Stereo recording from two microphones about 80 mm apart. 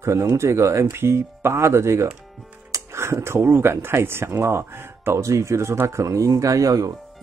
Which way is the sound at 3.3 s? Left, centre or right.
Right.